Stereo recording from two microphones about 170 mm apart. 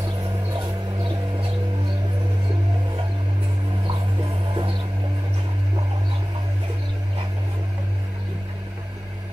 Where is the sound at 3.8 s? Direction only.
30° right (ahead or behind).